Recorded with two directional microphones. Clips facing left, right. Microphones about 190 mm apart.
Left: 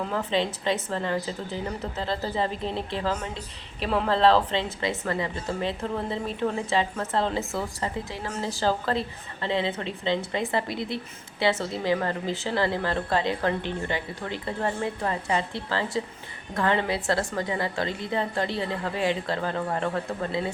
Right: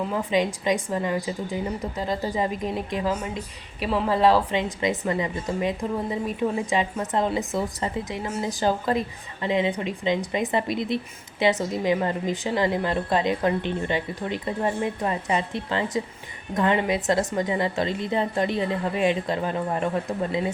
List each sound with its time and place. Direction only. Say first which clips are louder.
0.1 s a woman's voice: right 2 dB; 10° right (ahead or behind)